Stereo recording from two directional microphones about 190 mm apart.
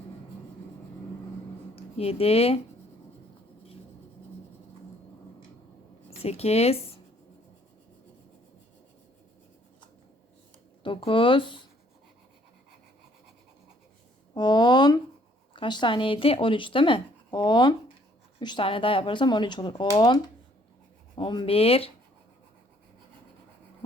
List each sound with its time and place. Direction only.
1.7 s speech: 30° left (ahead or behind)
6.1 s speech: 35° left (ahead or behind)
10.8 s speech: 25° left (ahead or behind)
14.3 s speech: 25° left (ahead or behind)
21.2 s speech: 25° left (ahead or behind)